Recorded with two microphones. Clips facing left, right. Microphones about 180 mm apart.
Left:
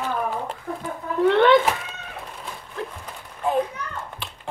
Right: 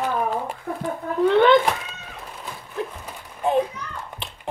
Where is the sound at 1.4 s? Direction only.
5° left (ahead or behind).